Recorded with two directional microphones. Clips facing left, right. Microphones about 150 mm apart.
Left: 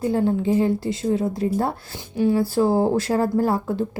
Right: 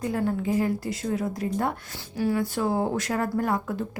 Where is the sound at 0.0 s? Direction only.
30° left (ahead or behind).